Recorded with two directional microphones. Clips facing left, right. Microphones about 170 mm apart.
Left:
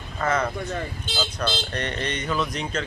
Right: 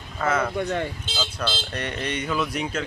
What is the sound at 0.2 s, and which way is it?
Speech, 5° right (ahead or behind).